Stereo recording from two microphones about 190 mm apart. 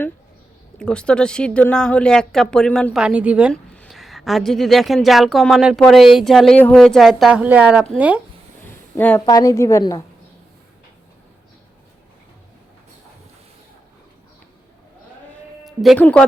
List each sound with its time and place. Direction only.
0.8 s a woman's voice: 5° left (ahead or behind)
9.0 s a woman's voice: 10° left (ahead or behind)
15.6 s speech: centre (ahead or behind)